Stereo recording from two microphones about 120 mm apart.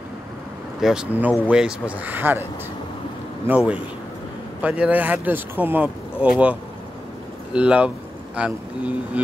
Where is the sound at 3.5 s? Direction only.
10° right (ahead or behind).